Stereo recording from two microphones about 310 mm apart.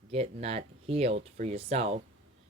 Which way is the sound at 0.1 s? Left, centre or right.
Centre.